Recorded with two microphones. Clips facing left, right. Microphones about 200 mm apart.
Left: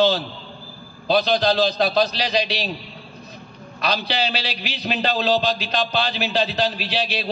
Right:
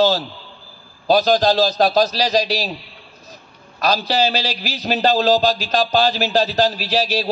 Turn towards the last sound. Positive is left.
turn(degrees=-45)  # may be behind; listen again after turning